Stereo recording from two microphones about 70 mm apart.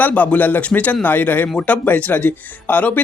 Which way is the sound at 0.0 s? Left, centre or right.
Left.